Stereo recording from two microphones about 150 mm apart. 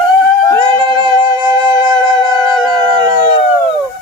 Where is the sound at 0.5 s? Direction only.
35° right (ahead or behind).